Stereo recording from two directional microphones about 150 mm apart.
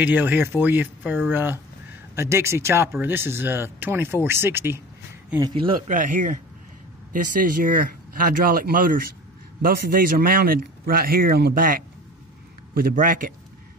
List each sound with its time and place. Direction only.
0.0 s speech: 10° right (ahead or behind)
5.4 s speech: 35° right (ahead or behind)
5.9 s speech: 60° right (ahead or behind)